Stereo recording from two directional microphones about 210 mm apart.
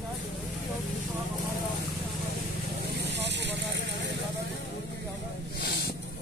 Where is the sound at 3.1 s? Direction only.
55° right (ahead or behind).